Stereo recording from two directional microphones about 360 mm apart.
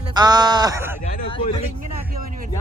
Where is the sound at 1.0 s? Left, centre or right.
Centre.